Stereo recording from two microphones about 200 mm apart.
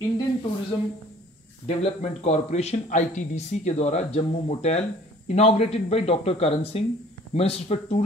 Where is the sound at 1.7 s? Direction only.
30° left (ahead or behind).